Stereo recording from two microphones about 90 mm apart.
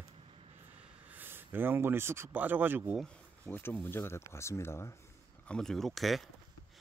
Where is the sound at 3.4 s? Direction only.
20° left (ahead or behind).